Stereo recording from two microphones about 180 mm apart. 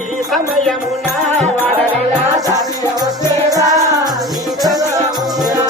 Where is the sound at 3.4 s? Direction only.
20° right (ahead or behind).